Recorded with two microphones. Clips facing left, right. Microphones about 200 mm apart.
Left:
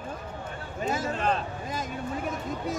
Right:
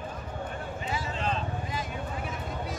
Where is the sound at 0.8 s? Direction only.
45° left (ahead or behind).